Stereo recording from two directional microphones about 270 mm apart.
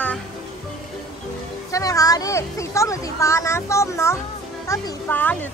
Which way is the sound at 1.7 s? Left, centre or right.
Centre.